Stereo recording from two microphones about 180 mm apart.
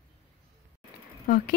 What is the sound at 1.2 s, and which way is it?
Speech, 55° left (ahead or behind).